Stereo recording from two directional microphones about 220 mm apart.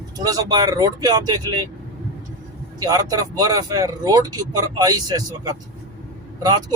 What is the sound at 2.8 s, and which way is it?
Speech, 15° right (ahead or behind).